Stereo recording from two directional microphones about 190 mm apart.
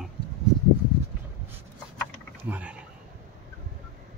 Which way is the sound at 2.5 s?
10° right (ahead or behind).